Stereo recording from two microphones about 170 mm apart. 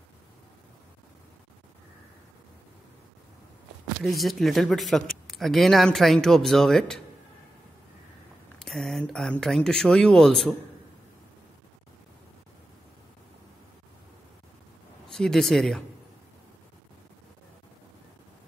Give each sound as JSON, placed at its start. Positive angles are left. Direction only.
{"t": 4.0, "sound": "speech", "side_deg": 0}
{"t": 8.5, "sound": "speech", "side_deg": 0}
{"t": 15.0, "sound": "speech", "side_deg": 5}